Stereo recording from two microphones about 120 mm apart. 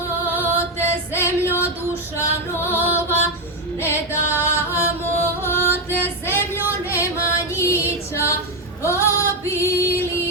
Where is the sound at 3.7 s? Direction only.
20° left (ahead or behind).